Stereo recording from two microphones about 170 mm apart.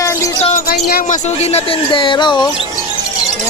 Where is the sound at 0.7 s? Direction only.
65° left (ahead or behind).